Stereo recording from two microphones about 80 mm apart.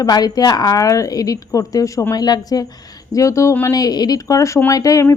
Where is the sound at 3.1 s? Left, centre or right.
Left.